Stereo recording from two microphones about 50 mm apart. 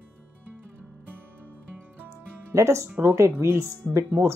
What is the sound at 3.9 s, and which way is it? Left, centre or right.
Speech, right.